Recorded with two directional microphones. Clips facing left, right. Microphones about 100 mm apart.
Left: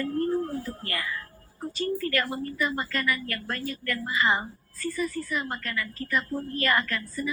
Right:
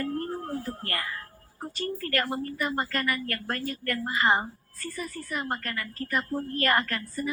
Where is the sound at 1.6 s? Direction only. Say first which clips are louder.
Left 4 dB; 45° right (ahead or behind).